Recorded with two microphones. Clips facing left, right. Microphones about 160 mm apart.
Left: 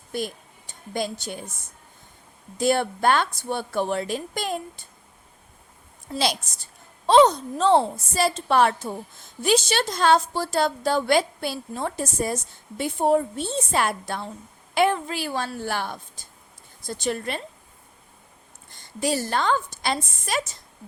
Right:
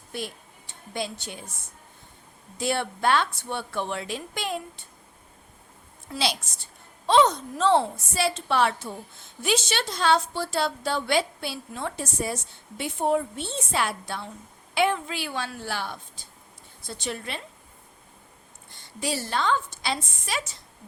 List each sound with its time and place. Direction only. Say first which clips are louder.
0.1 s a woman's voice: left 5 dB; 40° left (ahead or behind)
2.6 s a woman's voice: left 5 dB; 45° left (ahead or behind)
6.1 s a woman's voice: left 3 dB; 45° left (ahead or behind)
18.7 s a woman's voice: left 5 dB; 45° left (ahead or behind)